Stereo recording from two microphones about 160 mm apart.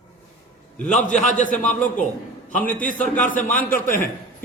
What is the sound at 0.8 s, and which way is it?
Speech, 50° left (ahead or behind).